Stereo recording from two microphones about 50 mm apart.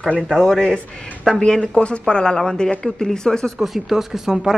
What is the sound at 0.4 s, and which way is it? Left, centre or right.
A man's voice, centre.